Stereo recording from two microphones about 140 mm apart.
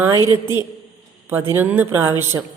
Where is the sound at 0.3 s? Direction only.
20° right (ahead or behind).